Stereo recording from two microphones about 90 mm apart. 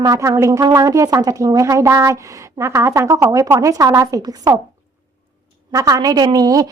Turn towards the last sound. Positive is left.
turn(degrees=-45)  # may be behind; listen again after turning